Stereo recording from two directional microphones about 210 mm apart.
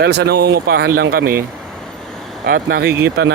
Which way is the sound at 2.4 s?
45° right (ahead or behind).